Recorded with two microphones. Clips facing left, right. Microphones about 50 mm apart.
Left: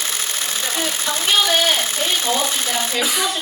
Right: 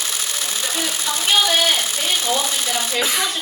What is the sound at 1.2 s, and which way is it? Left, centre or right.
Speech, centre.